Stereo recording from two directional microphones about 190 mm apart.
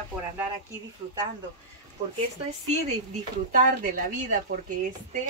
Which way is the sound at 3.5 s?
45° right (ahead or behind).